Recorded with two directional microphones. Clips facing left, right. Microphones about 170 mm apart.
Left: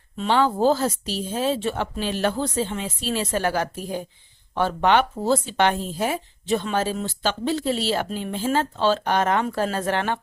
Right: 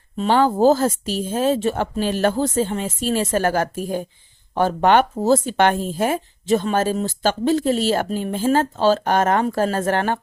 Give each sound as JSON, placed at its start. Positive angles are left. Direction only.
{"t": 0.2, "sound": "speech", "side_deg": -40}